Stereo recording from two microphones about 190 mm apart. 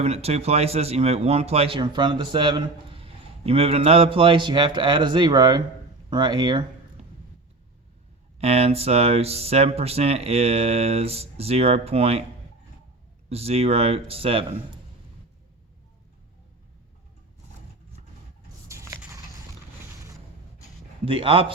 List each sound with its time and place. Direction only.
0.0 s speech: 35° right (ahead or behind)
7.0 s a sound: 35° right (ahead or behind)
8.4 s speech: 35° right (ahead or behind)
13.3 s speech: 30° right (ahead or behind)
18.7 s a sound: 15° right (ahead or behind)
21.0 s speech: 30° right (ahead or behind)